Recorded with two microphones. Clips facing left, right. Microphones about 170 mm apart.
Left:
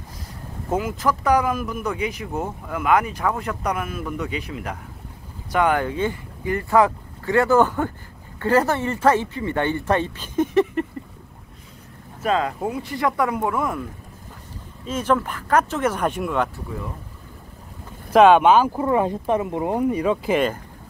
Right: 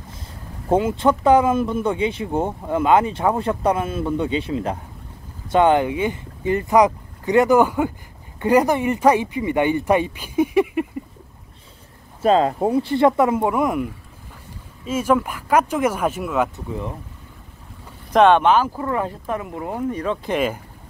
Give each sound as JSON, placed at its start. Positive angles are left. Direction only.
{"t": 0.7, "sound": "speech", "side_deg": -30}
{"t": 5.9, "sound": "speech", "side_deg": -15}
{"t": 12.2, "sound": "speech", "side_deg": -30}
{"t": 14.9, "sound": "speech", "side_deg": -10}
{"t": 18.1, "sound": "speech", "side_deg": 5}
{"t": 20.3, "sound": "speech", "side_deg": -5}